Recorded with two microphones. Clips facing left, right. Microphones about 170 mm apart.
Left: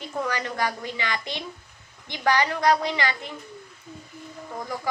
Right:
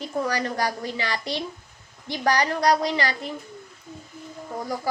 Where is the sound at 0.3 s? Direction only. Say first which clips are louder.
Even; 40° right (ahead or behind).